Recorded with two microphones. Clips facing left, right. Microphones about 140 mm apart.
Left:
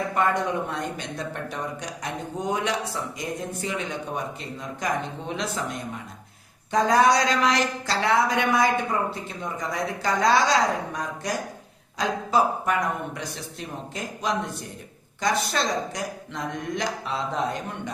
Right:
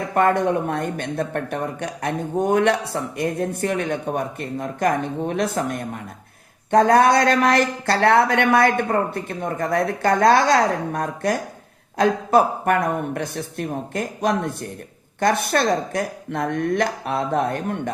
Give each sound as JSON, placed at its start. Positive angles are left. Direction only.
{"t": 0.1, "sound": "speech", "side_deg": -55}